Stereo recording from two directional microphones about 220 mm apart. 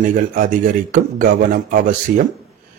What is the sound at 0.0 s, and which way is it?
A man's voice, 40° right (ahead or behind).